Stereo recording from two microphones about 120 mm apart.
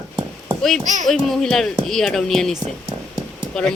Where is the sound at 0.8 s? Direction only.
90° right.